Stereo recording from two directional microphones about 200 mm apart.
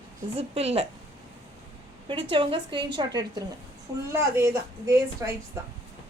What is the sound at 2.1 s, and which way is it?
A woman's voice, 25° right (ahead or behind).